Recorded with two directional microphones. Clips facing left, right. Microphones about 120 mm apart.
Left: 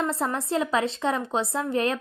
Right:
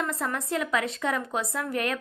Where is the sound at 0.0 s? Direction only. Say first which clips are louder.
Left 3 dB; 30° left (ahead or behind).